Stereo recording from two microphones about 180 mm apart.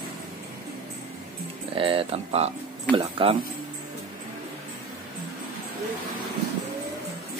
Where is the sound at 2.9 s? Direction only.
30° right (ahead or behind).